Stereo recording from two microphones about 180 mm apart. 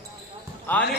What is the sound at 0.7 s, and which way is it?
Speech, 10° left (ahead or behind).